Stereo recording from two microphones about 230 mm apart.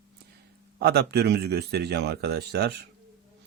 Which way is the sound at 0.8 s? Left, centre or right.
Right.